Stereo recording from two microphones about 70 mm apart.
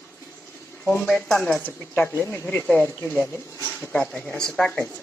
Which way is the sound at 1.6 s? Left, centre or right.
Left.